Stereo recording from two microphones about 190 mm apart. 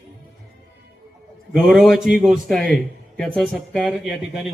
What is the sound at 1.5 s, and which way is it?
A man's voice, 5° right (ahead or behind).